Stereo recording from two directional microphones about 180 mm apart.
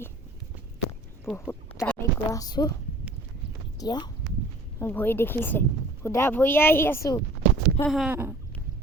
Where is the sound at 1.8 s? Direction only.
15° left (ahead or behind).